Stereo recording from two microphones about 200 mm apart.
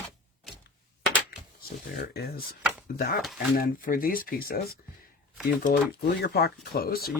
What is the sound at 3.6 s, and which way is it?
Speech, 45° left (ahead or behind).